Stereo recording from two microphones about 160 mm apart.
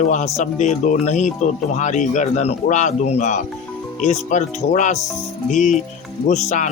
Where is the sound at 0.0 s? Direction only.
50° left (ahead or behind).